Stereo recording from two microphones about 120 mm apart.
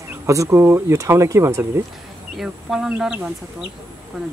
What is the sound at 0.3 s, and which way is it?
Speech, 25° right (ahead or behind).